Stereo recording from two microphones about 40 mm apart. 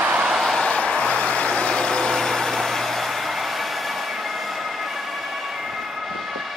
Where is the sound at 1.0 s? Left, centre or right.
Left; by 5.0 s centre.